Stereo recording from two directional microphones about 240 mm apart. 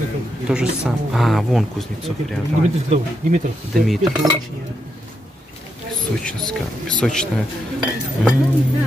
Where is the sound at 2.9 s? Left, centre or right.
Right.